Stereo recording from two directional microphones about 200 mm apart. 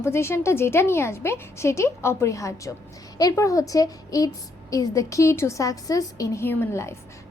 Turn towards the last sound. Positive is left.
turn(degrees=10)  # may be behind; listen again after turning